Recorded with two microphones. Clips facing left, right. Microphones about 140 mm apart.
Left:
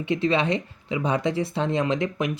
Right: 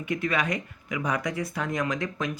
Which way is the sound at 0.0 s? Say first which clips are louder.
Left 5 dB; 25° left (ahead or behind).